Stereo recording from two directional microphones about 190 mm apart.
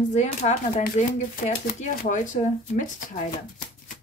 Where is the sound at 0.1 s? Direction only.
35° left (ahead or behind).